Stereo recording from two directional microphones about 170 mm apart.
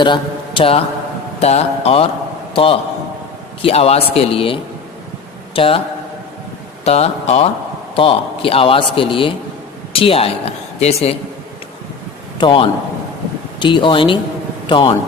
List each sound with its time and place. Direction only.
0.0 s a man's voice: 30° left (ahead or behind)
3.6 s a man's voice: 35° left (ahead or behind)
6.8 s a man's voice: 40° left (ahead or behind)
12.4 s a man's voice: 30° left (ahead or behind)